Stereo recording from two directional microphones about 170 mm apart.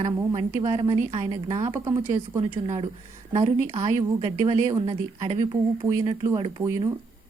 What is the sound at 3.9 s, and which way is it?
A woman's voice, 20° right (ahead or behind).